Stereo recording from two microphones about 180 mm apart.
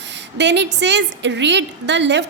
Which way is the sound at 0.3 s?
75° right (ahead or behind).